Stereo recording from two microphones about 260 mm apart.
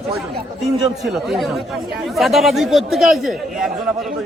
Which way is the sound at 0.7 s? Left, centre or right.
Centre.